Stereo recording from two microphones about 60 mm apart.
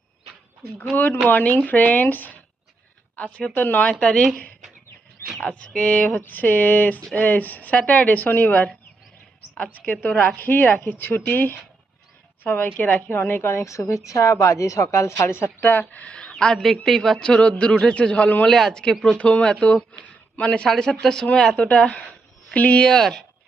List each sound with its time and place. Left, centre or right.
0.9 s a woman's voice: left
3.3 s speech: centre
3.6 s speech: left
5.5 s speech: centre
9.7 s a woman's voice: left
13.5 s a woman's voice: left; by 17.2 s centre
17.2 s speech: centre
18.4 s speech: centre